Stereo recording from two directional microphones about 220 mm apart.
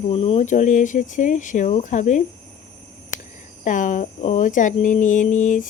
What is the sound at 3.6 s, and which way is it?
Speech, 35° left (ahead or behind).